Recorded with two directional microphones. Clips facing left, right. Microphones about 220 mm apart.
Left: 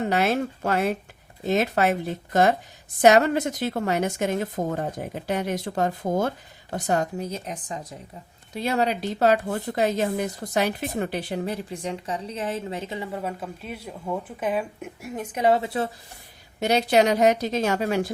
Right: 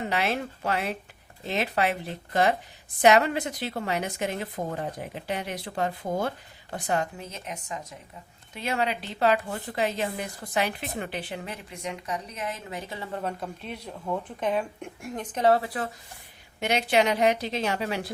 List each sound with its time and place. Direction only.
0.0 s a woman's voice: 45° left (ahead or behind); by 13.1 s 20° left (ahead or behind)
13.1 s a woman's voice: 5° left (ahead or behind); by 15.9 s 25° left (ahead or behind)
16.6 s a woman's voice: 40° left (ahead or behind)